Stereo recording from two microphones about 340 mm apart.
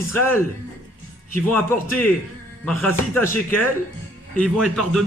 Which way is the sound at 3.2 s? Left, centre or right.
Centre.